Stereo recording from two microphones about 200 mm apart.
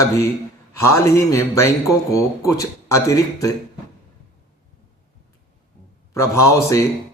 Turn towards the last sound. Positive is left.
turn(degrees=15)  # may be behind; listen again after turning